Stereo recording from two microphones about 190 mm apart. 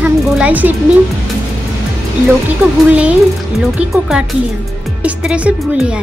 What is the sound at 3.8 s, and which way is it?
Speech, 5° right (ahead or behind).